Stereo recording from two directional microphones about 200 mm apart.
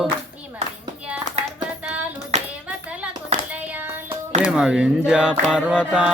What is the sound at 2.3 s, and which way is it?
Clapping, 35° right (ahead or behind).